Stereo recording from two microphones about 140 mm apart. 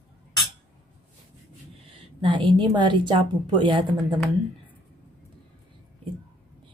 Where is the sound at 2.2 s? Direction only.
35° right (ahead or behind).